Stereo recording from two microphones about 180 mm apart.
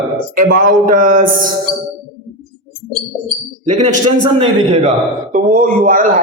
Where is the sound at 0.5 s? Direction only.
50° right (ahead or behind).